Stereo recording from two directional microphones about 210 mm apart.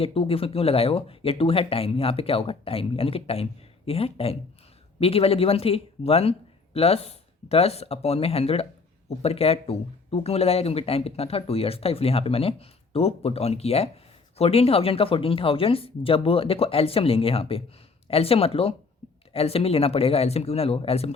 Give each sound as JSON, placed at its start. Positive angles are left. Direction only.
{"t": 0.0, "sound": "speech", "side_deg": 25}